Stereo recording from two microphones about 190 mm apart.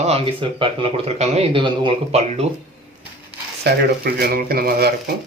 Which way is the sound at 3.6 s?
55° right (ahead or behind).